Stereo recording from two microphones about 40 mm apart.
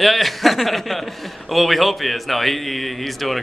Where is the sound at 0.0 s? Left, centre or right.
Centre.